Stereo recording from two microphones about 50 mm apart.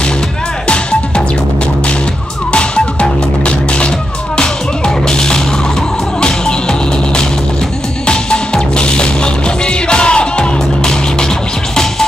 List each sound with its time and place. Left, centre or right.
2.5 s music: left